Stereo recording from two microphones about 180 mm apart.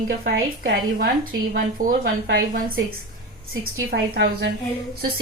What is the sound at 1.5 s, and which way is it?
A woman's voice, 50° right (ahead or behind).